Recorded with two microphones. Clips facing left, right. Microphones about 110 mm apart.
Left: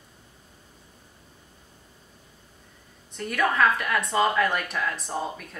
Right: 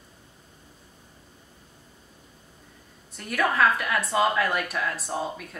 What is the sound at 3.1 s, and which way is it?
A woman's voice, 5° right (ahead or behind).